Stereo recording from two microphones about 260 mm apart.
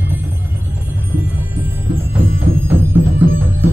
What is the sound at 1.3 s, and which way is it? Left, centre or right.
Music, centre.